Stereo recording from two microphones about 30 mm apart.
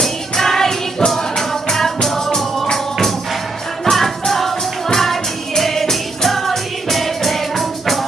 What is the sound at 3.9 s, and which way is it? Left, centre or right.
Music, centre.